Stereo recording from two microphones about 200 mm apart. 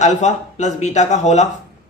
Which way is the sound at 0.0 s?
35° left (ahead or behind).